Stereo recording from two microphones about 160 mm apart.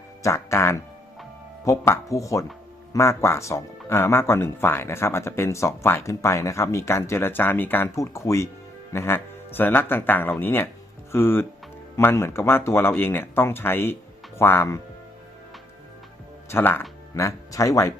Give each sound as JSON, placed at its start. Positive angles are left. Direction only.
{"t": 0.2, "sound": "speech", "side_deg": 20}
{"t": 16.5, "sound": "speech", "side_deg": 15}